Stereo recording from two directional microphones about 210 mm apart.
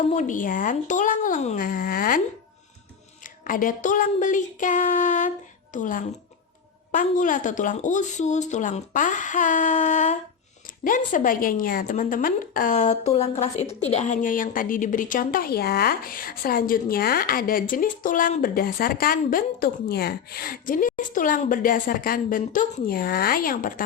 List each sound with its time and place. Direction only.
0.1 s a woman's voice: 35° left (ahead or behind)
3.4 s a woman's voice: 40° left (ahead or behind)